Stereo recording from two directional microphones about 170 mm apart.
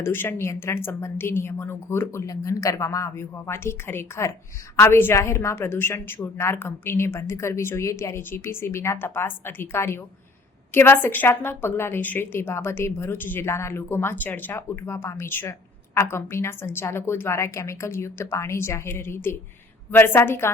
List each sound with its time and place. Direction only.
0.0 s a woman's voice: 15° left (ahead or behind)